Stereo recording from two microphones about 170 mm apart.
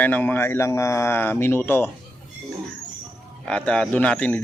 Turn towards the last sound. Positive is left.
turn(degrees=10)  # may be behind; listen again after turning